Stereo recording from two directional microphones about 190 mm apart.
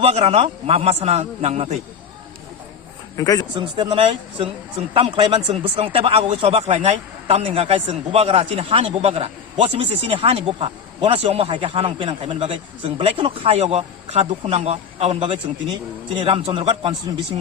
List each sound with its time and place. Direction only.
0.0 s speech: 30° right (ahead or behind)
3.2 s a man's voice: 20° left (ahead or behind)
3.5 s speech: 25° right (ahead or behind)